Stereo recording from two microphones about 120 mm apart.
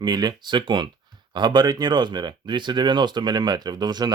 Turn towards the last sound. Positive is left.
turn(degrees=-35)  # may be behind; listen again after turning